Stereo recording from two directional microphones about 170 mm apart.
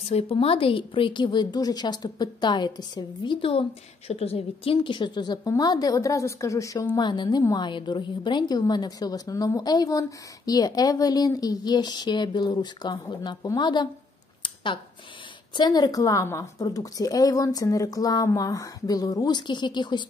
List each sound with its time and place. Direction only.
0.1 s a woman's voice: 35° left (ahead or behind)
14.4 s a sound: 30° left (ahead or behind)
15.5 s a woman's voice: 25° left (ahead or behind)